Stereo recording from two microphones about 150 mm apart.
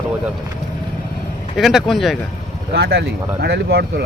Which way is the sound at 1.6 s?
Centre (ahead or behind).